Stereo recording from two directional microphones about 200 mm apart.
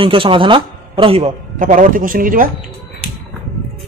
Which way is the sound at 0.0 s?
25° right (ahead or behind).